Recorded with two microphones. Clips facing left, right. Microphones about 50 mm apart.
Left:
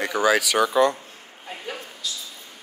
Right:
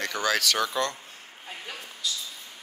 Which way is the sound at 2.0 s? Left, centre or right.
Centre.